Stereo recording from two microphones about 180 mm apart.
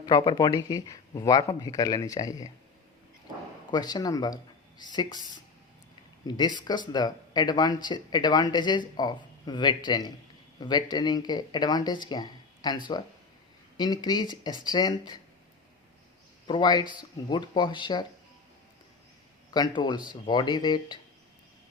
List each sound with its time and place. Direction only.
0.0 s speech: 25° left (ahead or behind)
3.7 s speech: 20° left (ahead or behind)
6.2 s speech: 25° left (ahead or behind)
16.5 s speech: 25° left (ahead or behind)
19.5 s speech: 20° left (ahead or behind)